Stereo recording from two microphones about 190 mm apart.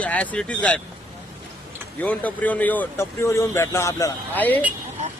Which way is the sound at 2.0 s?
10° left (ahead or behind).